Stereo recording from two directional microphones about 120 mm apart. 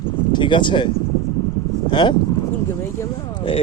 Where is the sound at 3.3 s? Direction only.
50° left (ahead or behind).